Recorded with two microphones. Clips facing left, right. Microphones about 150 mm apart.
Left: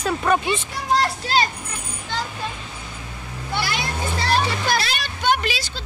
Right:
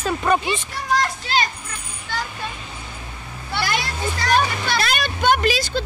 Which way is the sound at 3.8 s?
30° left (ahead or behind).